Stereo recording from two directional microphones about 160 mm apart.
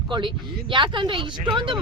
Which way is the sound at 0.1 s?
30° right (ahead or behind).